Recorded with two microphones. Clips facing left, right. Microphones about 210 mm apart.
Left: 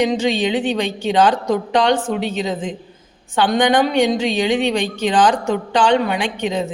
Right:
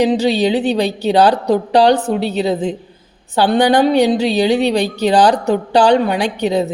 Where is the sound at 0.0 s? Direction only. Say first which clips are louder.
Right 4 dB; 35° right (ahead or behind).